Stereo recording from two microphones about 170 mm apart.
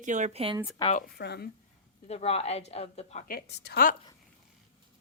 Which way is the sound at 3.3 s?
70° left (ahead or behind).